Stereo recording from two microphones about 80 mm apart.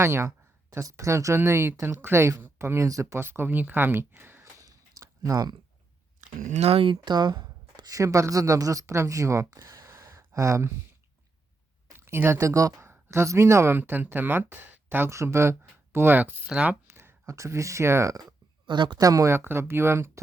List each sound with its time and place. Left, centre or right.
0.0 s speech: right
4.6 s a sound: right
7.0 s a woman's voice: right
11.9 s speech: right
15.1 s speech: right; by 16.7 s centre
16.8 s speech: right
18.6 s speech: right
18.9 s speech: right
19.3 s speech: right